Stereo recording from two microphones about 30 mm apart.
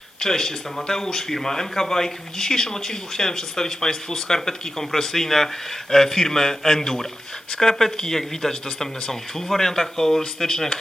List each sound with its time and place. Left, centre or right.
0.2 s speech: centre